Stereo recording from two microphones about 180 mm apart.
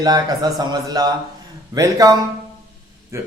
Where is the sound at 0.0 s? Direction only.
20° right (ahead or behind).